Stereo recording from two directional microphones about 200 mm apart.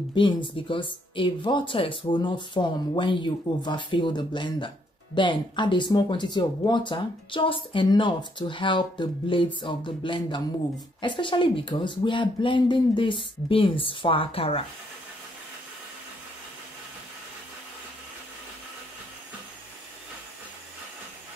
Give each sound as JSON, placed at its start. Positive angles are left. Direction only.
{"t": 0.1, "sound": "speech", "side_deg": 25}